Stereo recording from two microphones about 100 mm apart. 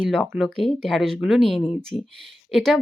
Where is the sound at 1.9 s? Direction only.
55° left (ahead or behind).